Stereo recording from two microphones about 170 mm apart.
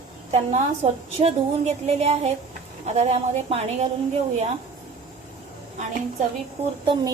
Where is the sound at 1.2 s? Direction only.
35° right (ahead or behind).